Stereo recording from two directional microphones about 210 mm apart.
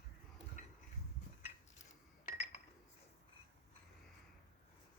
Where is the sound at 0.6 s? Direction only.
35° left (ahead or behind).